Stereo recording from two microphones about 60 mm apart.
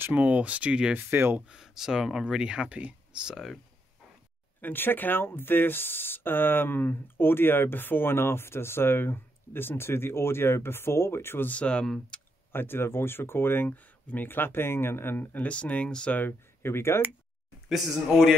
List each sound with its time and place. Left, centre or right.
0.0 s speech: right
0.9 s speech: right
1.5 s speech: centre
4.6 s speech: left
11.4 s speech: left
12.5 s speech: left
13.7 s speech: left
15.3 s speech: left
16.2 s speech: left
17.6 s speech: centre